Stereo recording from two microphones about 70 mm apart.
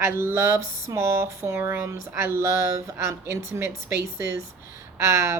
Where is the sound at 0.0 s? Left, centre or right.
Right.